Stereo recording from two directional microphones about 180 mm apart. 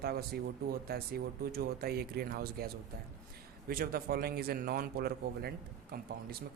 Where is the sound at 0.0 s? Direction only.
60° right (ahead or behind).